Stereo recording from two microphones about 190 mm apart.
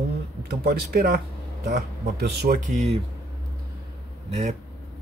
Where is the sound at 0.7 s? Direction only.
50° right (ahead or behind).